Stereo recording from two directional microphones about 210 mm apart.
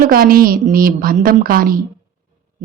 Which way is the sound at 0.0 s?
45° right (ahead or behind).